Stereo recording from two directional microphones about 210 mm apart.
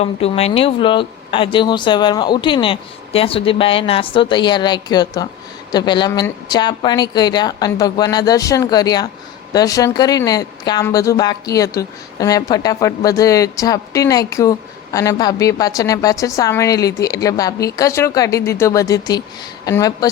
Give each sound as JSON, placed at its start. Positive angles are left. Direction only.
{"t": 0.0, "sound": "speech", "side_deg": 30}